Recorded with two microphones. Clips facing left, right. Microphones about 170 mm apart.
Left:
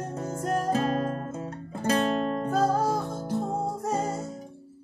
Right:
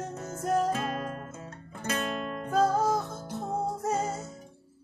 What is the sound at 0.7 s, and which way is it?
Guitar, 35° left (ahead or behind).